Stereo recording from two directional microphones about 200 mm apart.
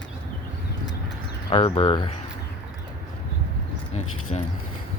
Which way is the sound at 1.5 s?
25° left (ahead or behind).